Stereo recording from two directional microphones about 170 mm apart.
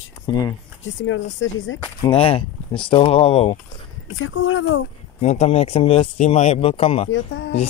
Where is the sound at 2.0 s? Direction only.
35° left (ahead or behind).